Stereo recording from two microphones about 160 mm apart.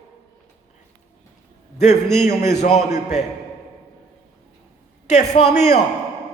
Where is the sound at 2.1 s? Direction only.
45° left (ahead or behind).